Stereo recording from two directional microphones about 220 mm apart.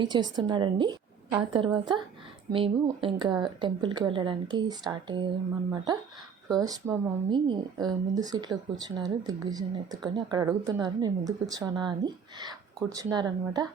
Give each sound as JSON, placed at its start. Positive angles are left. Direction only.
{"t": 0.0, "sound": "speech", "side_deg": -20}